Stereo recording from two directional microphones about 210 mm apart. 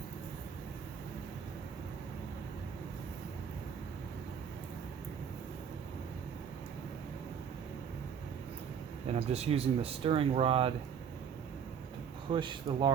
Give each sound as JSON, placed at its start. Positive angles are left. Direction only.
{"t": 9.0, "sound": "speech", "side_deg": -30}
{"t": 12.3, "sound": "speech", "side_deg": -20}